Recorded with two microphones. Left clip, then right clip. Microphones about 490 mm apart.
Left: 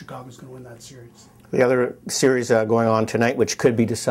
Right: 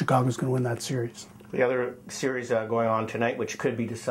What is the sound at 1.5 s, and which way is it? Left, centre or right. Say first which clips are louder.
Speech: left 7 dB; left.